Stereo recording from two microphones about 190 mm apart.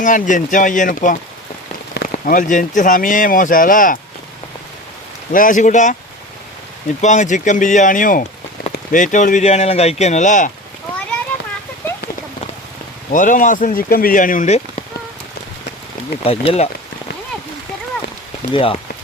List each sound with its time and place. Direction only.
0.0 s speech: 40° left (ahead or behind)
5.3 s speech: 45° left (ahead or behind)
7.0 s speech: 40° left (ahead or behind)
13.1 s speech: 45° left (ahead or behind)
16.2 s speech: 30° left (ahead or behind)
18.5 s speech: 30° left (ahead or behind)